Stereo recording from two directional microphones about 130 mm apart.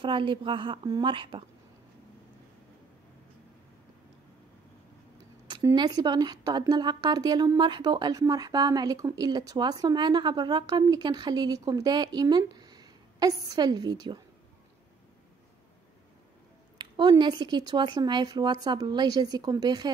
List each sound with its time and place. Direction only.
0.0 s a woman's voice: 40° right (ahead or behind)
5.8 s a woman's voice: 30° right (ahead or behind)
16.7 s a woman's voice: 35° right (ahead or behind)